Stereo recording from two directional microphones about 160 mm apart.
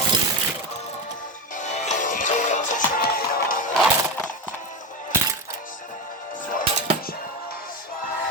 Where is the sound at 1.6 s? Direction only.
45° left (ahead or behind).